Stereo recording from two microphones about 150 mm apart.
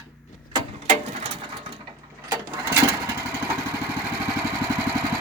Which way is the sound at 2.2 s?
15° right (ahead or behind).